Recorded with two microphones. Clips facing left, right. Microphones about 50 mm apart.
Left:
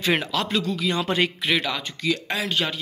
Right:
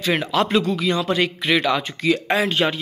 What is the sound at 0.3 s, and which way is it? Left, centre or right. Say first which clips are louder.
Speech: right 6 dB; centre.